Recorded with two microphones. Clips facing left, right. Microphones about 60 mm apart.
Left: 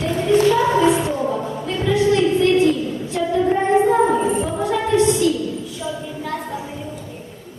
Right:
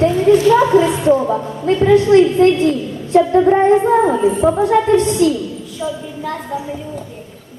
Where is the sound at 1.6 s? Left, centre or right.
Right.